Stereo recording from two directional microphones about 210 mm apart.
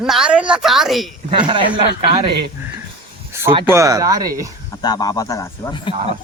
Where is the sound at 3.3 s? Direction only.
10° right (ahead or behind).